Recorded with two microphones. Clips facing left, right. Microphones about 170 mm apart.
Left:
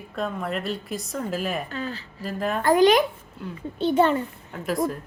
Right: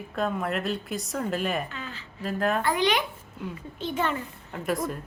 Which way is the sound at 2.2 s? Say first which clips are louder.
Right 1 dB; centre (ahead or behind).